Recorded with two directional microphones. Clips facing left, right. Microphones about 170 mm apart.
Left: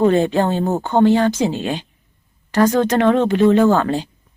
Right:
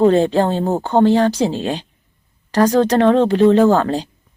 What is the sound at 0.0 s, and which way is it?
A woman's voice, 35° right (ahead or behind).